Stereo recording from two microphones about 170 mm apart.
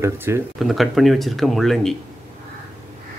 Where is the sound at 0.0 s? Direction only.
15° right (ahead or behind).